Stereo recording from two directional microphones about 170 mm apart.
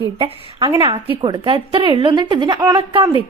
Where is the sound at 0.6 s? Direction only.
20° right (ahead or behind).